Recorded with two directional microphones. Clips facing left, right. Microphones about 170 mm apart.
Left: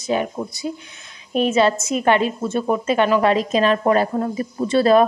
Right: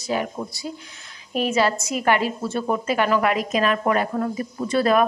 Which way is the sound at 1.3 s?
25° left (ahead or behind).